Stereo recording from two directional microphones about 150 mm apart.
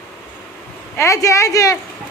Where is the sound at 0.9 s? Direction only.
20° left (ahead or behind).